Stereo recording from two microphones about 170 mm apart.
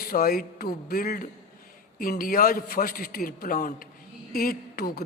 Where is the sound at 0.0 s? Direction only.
60° left (ahead or behind).